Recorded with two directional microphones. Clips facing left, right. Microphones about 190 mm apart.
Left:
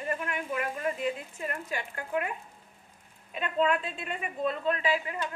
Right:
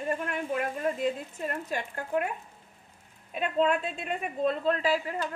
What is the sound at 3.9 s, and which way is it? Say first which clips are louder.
Speech: right 3 dB; 40° right (ahead or behind).